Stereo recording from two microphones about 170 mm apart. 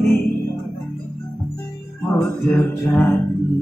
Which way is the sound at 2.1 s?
10° left (ahead or behind).